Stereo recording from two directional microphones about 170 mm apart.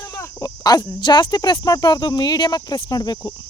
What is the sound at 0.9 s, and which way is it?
Speech, 25° left (ahead or behind).